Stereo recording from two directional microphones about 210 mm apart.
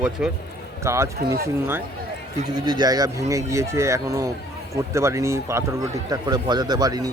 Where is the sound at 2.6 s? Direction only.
20° right (ahead or behind).